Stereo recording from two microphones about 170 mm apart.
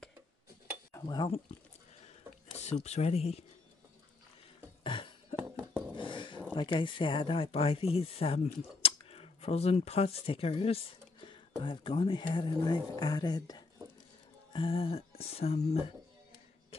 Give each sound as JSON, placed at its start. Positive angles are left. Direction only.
{"t": 0.9, "sound": "speech", "side_deg": 25}
{"t": 2.6, "sound": "speech", "side_deg": 40}
{"t": 4.8, "sound": "music", "side_deg": 30}
{"t": 5.6, "sound": "a sound", "side_deg": 5}
{"t": 5.9, "sound": "a sound", "side_deg": 30}
{"t": 6.5, "sound": "speech", "side_deg": 30}